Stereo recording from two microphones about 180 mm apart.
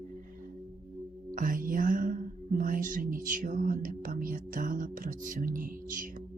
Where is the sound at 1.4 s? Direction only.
50° right (ahead or behind).